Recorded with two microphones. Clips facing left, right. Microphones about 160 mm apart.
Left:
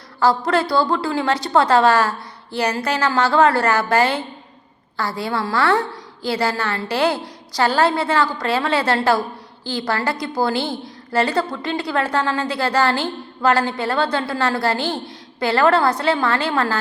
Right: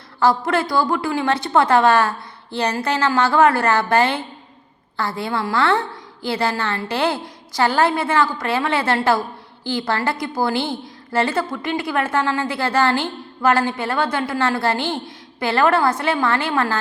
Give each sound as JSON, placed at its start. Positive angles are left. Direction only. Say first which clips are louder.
{"t": 0.3, "sound": "a woman's voice", "louder": "left 1 dB", "side_deg": -20}